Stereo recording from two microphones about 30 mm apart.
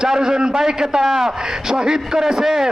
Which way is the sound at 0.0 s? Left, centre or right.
Right.